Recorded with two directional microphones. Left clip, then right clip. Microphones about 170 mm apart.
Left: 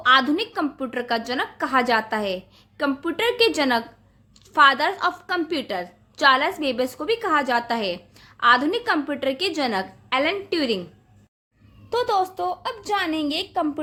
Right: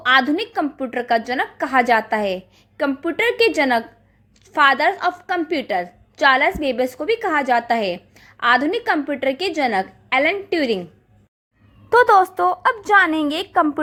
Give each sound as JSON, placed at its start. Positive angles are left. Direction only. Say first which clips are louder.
{"t": 0.0, "sound": "a woman's voice", "louder": "right 2 dB", "side_deg": -20}
{"t": 11.9, "sound": "a woman's voice", "louder": "right 9 dB", "side_deg": -25}